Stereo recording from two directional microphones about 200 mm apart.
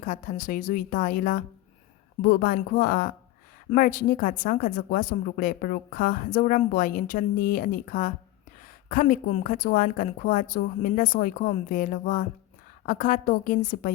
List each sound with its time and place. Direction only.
0.0 s a woman's voice: 40° left (ahead or behind)